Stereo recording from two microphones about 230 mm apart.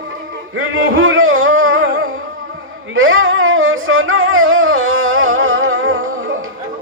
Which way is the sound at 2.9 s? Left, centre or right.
Right.